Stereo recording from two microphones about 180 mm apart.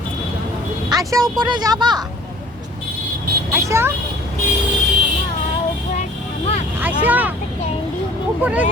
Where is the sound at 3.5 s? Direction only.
15° right (ahead or behind).